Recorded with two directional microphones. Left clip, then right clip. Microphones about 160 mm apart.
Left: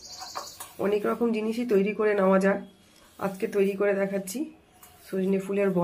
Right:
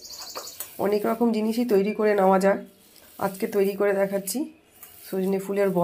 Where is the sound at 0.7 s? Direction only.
25° right (ahead or behind).